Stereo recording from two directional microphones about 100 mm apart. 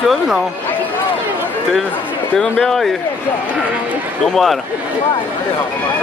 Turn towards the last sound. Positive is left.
turn(degrees=0)  # may be behind; listen again after turning